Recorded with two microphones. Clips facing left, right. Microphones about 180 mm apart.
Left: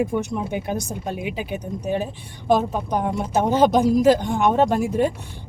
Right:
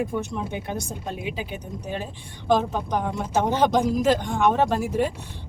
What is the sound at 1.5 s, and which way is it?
Speech, 15° left (ahead or behind).